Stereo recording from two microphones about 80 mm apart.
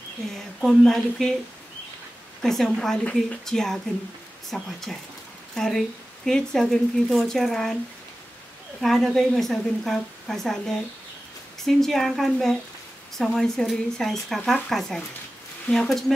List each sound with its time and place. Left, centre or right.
0.6 s a woman's voice: centre
2.4 s a woman's voice: centre
8.8 s a woman's voice: centre
15.7 s speech: centre